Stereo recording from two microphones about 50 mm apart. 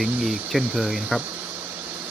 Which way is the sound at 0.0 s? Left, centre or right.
Centre.